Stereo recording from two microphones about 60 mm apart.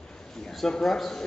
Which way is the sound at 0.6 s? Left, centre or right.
Centre.